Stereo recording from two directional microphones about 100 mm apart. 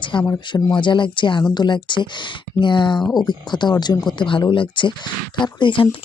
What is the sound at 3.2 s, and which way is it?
Speech, 50° left (ahead or behind).